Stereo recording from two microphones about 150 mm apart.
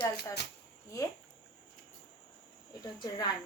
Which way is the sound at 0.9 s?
20° left (ahead or behind).